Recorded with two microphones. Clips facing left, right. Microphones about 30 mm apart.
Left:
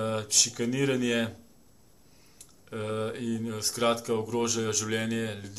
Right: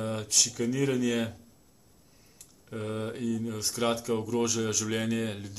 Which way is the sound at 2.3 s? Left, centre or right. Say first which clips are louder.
Left 2 dB; centre.